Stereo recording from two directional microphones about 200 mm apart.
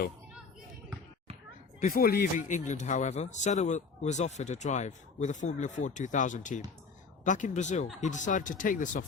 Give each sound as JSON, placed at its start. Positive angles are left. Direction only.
{"t": 1.8, "sound": "speech", "side_deg": 45}